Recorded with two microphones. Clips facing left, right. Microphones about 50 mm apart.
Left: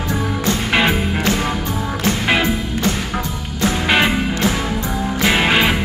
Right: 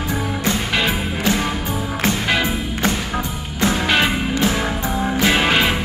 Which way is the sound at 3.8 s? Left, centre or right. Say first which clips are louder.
Left 3 dB; centre.